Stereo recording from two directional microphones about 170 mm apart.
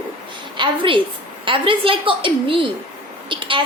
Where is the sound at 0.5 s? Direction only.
30° right (ahead or behind).